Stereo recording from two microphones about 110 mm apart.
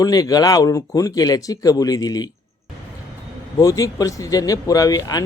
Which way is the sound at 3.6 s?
30° left (ahead or behind).